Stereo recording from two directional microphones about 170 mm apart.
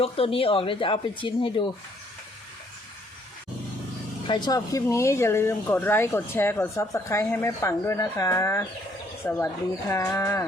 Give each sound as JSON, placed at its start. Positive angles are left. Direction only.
{"t": 0.0, "sound": "speech", "side_deg": 35}
{"t": 4.3, "sound": "speech", "side_deg": 25}